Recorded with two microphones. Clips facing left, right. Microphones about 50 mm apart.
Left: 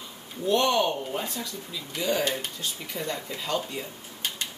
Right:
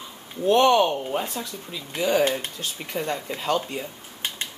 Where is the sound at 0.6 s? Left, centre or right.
Right.